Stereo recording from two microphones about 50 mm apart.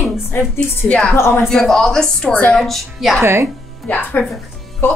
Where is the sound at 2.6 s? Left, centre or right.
Centre.